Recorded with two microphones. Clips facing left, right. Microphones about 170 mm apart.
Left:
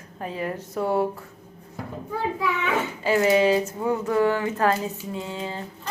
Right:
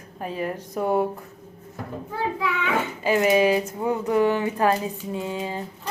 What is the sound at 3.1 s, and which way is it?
Speech, 20° right (ahead or behind).